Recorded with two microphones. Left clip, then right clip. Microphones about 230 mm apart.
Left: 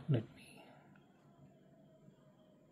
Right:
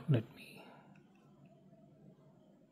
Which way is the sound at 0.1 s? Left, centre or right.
Centre.